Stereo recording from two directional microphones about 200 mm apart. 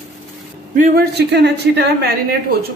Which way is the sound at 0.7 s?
45° right (ahead or behind).